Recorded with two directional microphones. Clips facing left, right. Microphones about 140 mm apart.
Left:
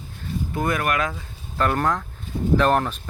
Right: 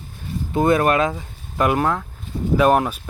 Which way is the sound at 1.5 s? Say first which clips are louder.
Right 3 dB; 10° right (ahead or behind).